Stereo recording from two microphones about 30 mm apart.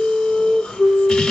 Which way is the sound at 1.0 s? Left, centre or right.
Left.